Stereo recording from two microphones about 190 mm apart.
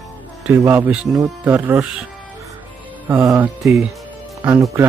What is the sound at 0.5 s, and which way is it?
Speech, 10° right (ahead or behind).